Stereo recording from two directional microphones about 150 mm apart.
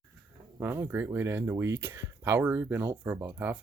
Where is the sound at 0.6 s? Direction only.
15° right (ahead or behind).